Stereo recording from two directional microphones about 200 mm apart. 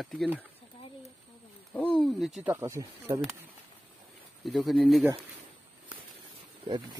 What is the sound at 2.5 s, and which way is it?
Speech, 15° right (ahead or behind).